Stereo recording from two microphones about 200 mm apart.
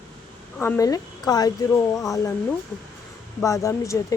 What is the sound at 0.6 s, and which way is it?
A woman's voice, 15° left (ahead or behind).